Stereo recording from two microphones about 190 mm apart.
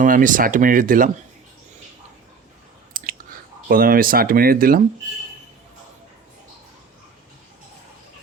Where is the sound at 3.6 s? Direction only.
50° right (ahead or behind).